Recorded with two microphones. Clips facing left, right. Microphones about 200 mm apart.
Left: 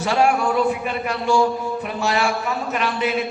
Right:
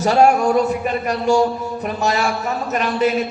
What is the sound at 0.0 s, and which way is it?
A man's voice, 40° right (ahead or behind).